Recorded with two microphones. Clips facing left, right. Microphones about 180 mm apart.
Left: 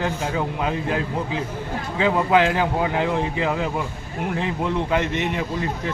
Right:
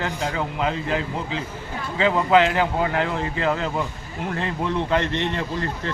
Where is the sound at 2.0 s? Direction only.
15° left (ahead or behind).